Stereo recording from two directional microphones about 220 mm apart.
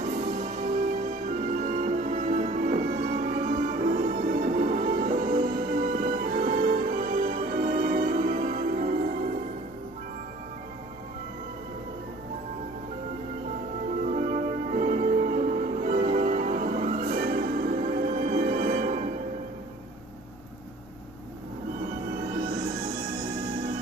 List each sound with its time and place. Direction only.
0.0 s music: 35° right (ahead or behind)
14.1 s music: 35° right (ahead or behind)